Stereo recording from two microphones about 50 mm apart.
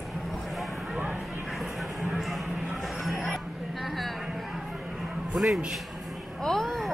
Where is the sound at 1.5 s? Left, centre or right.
Centre.